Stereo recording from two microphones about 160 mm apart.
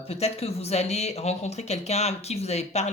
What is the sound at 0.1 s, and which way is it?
Speech, 40° left (ahead or behind).